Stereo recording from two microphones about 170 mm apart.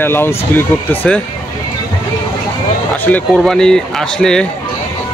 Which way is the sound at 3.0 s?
5° left (ahead or behind).